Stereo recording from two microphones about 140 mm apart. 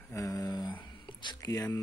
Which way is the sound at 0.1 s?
25° left (ahead or behind).